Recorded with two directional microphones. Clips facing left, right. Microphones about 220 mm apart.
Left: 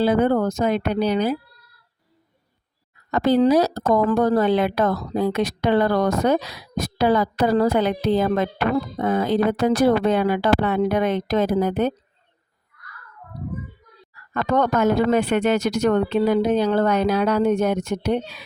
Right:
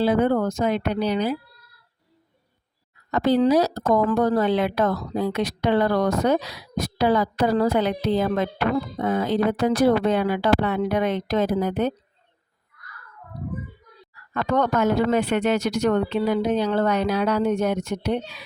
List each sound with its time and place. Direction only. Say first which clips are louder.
0.0 s a woman's voice: left 2 dB; 45° left (ahead or behind)
3.1 s a woman's voice: left 2 dB; 50° left (ahead or behind)
14.1 s a woman's voice: left 2 dB; 45° left (ahead or behind)